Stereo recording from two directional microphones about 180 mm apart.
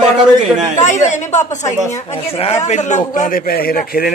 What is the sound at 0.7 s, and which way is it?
A man's voice, 40° left (ahead or behind).